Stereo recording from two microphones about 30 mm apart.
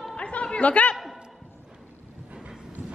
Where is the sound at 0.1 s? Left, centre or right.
Left.